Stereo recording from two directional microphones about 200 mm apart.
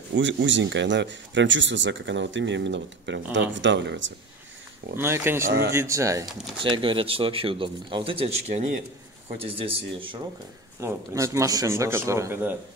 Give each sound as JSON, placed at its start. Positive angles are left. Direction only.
{"t": 0.1, "sound": "speech", "side_deg": -65}
{"t": 4.9, "sound": "a man's voice", "side_deg": -10}
{"t": 10.8, "sound": "a man's voice", "side_deg": -15}